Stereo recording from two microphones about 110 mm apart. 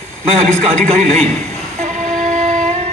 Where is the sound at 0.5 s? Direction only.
90° right.